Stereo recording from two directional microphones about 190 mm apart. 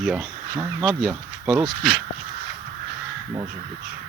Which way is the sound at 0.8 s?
Centre (ahead or behind).